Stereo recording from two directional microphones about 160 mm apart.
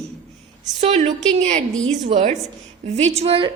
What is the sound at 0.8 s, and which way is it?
A woman's voice, 40° right (ahead or behind).